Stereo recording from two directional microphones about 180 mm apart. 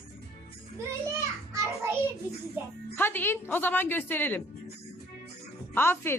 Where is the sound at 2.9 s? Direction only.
10° left (ahead or behind).